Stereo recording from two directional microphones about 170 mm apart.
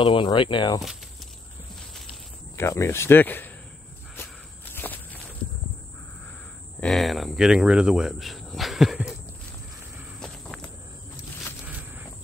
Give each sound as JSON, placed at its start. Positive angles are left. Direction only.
{"t": 0.0, "sound": "speech", "side_deg": 30}
{"t": 2.5, "sound": "speech", "side_deg": 15}
{"t": 4.7, "sound": "walk", "side_deg": 10}
{"t": 6.8, "sound": "speech", "side_deg": 0}
{"t": 11.6, "sound": "walk", "side_deg": -10}